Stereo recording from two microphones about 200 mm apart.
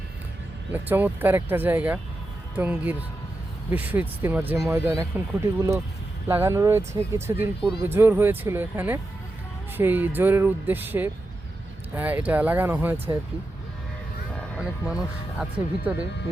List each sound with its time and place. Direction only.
0.7 s speech: 10° right (ahead or behind)
14.5 s speech: 5° right (ahead or behind)